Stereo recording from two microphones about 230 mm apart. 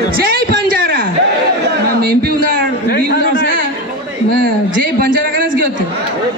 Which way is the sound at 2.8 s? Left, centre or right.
Left.